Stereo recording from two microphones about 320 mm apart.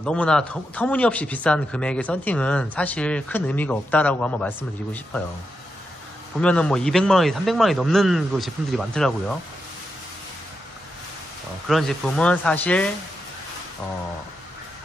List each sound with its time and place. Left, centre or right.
0.0 s speech: centre
6.4 s speech: centre
11.6 s speech: centre